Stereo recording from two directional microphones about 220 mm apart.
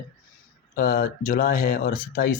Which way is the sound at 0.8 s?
40° left (ahead or behind).